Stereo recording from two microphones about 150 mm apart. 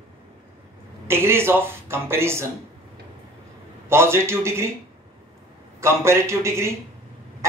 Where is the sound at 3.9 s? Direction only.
15° right (ahead or behind).